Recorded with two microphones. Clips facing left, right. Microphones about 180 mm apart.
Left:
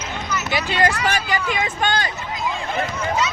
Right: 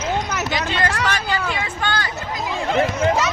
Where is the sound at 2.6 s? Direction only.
70° right (ahead or behind).